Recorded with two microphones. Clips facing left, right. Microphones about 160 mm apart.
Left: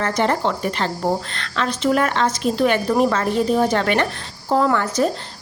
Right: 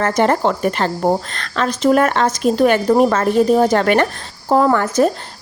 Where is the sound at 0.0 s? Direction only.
50° right (ahead or behind).